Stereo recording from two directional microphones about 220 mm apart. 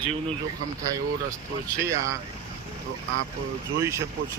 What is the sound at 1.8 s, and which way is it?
Speech, 15° right (ahead or behind).